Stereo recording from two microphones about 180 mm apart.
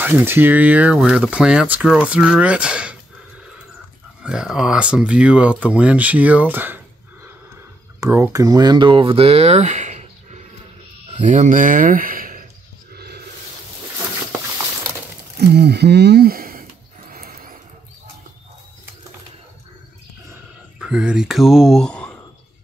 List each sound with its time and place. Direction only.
0.0 s speech: 10° right (ahead or behind)
4.2 s speech: 5° right (ahead or behind)
8.0 s speech: 15° right (ahead or behind); by 12.4 s 50° right (ahead or behind)
12.9 s a sound: 65° right (ahead or behind)
15.3 s speech: 65° right (ahead or behind)
17.1 s a sound: 50° right (ahead or behind)
20.8 s speech: 5° right (ahead or behind)